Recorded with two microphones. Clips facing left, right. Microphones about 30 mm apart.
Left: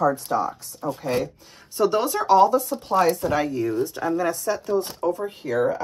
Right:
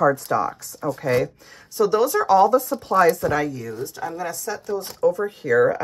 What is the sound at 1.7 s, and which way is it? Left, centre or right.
Speech, left.